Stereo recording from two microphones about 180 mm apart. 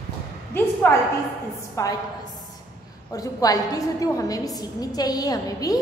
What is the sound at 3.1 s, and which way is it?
A woman's voice, 20° left (ahead or behind).